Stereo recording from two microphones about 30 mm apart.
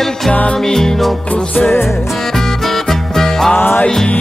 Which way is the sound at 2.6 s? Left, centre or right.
Centre.